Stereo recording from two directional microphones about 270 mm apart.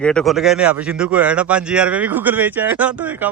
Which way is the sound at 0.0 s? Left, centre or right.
Centre.